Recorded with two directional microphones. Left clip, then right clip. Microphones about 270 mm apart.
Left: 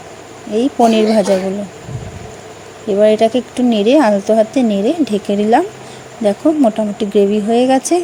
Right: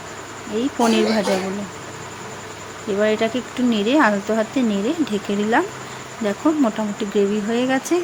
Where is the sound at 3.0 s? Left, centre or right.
Centre.